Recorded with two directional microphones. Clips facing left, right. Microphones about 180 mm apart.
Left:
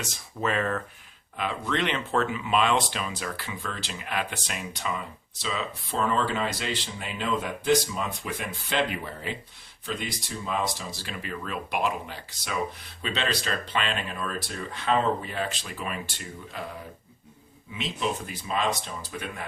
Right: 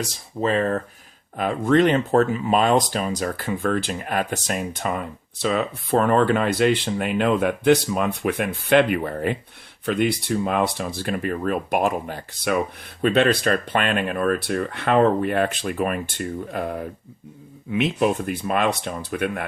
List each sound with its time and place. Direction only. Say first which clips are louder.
0.0 s speech: right 6 dB; 35° right (ahead or behind)
1.4 s speech: right 11 dB; 45° right (ahead or behind); by 19.5 s 65° right (ahead or behind)